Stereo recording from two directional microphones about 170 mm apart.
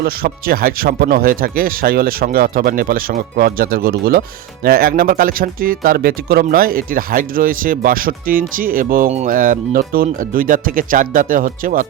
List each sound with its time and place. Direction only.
0.0 s speech: 60° right (ahead or behind)